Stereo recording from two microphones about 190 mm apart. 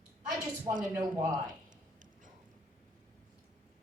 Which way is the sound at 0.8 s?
15° right (ahead or behind).